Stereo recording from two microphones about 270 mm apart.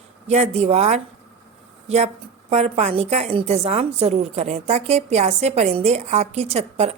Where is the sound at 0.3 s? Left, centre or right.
Right.